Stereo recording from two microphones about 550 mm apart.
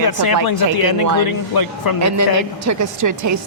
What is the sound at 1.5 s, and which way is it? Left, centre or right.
Speech, left.